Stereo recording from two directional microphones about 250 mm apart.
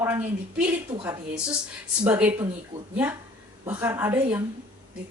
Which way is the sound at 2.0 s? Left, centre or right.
Centre.